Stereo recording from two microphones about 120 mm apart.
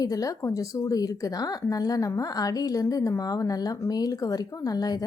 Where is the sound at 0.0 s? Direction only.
30° left (ahead or behind).